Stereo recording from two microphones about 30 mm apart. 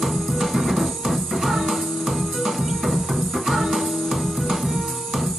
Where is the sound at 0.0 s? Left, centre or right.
Centre.